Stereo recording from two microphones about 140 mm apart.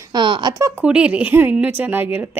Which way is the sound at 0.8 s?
10° right (ahead or behind).